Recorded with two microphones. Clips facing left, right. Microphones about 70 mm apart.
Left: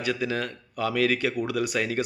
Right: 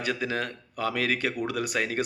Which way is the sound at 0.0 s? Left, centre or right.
Right.